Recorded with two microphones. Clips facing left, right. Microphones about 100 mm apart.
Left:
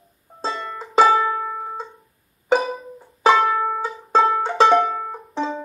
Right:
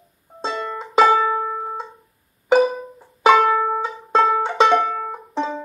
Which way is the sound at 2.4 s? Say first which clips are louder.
Right 4 dB; centre (ahead or behind).